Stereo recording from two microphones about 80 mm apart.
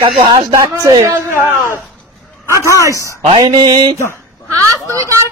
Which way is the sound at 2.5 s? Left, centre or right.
Right.